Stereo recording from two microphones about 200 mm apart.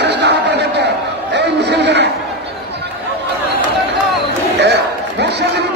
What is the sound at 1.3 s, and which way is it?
Chatter, 60° right (ahead or behind).